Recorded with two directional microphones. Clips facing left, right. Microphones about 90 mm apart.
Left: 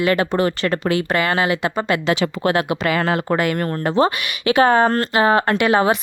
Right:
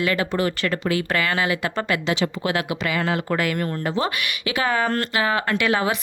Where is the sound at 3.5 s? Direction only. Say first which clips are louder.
Left 6 dB; 45° left (ahead or behind).